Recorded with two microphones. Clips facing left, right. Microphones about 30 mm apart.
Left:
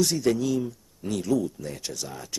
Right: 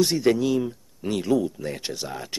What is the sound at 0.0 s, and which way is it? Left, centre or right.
Speech, right.